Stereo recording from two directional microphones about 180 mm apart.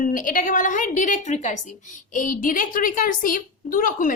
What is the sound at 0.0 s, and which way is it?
A woman's voice, 50° left (ahead or behind).